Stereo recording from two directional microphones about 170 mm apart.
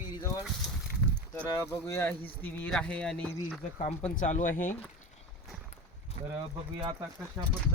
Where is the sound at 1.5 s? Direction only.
15° left (ahead or behind).